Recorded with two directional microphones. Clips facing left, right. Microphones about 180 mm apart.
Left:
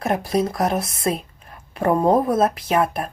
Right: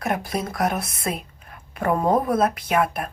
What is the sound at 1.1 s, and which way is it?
A woman's voice, 35° left (ahead or behind).